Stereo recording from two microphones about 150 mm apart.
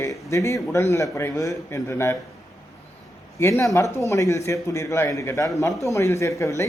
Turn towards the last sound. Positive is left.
turn(degrees=20)  # may be behind; listen again after turning